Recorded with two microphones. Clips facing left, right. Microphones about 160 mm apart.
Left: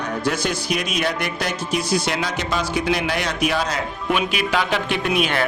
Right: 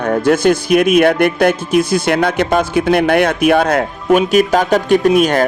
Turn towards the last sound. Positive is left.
turn(degrees=-45)  # may be behind; listen again after turning